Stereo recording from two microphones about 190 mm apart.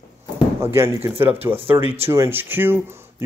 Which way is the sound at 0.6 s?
15° right (ahead or behind).